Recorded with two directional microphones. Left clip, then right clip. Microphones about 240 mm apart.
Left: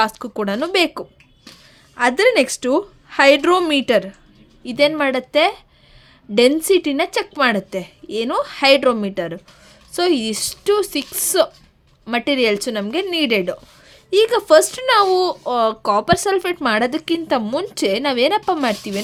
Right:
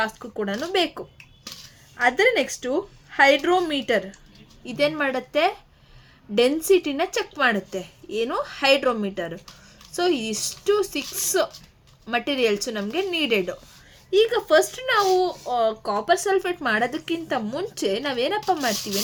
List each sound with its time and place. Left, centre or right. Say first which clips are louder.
0.2 s a child's voice: left 6 dB; left